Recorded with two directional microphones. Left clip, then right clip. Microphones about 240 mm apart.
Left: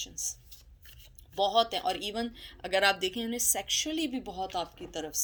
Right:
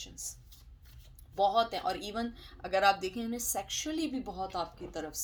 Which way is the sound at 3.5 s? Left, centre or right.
Left.